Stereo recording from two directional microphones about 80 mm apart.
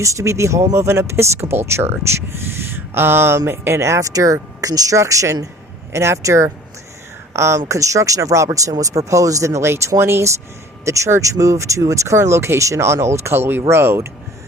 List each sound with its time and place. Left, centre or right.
0.0 s speech: right